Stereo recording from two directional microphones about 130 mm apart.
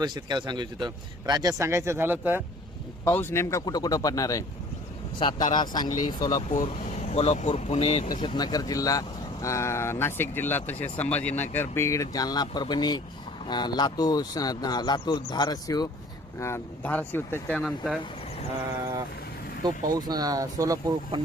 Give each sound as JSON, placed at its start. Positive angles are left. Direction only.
{"t": 0.0, "sound": "speech", "side_deg": -35}
{"t": 3.0, "sound": "speech", "side_deg": 20}
{"t": 5.5, "sound": "speech", "side_deg": 35}
{"t": 6.5, "sound": "speech", "side_deg": 65}
{"t": 8.1, "sound": "speech", "side_deg": 35}
{"t": 16.4, "sound": "speech", "side_deg": 15}
{"t": 17.6, "sound": "speech", "side_deg": 0}
{"t": 19.6, "sound": "speech", "side_deg": -30}